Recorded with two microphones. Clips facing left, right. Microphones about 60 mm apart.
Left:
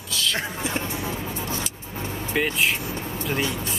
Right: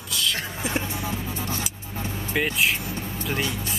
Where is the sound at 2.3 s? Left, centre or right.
Centre.